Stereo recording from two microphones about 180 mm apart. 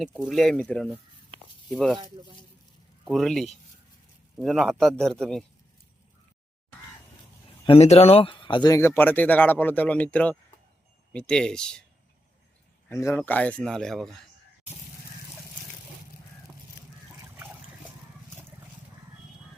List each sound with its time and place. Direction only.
0.0 s a man's voice: centre (ahead or behind)
3.1 s a man's voice: centre (ahead or behind)
7.6 s a man's voice: 35° left (ahead or behind); by 11.8 s 5° left (ahead or behind)
12.9 s speech: 15° left (ahead or behind)